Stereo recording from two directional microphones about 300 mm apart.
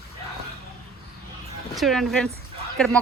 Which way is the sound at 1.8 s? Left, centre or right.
Centre.